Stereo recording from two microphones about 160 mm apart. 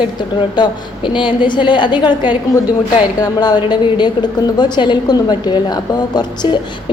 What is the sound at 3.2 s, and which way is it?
A woman's voice, 25° left (ahead or behind).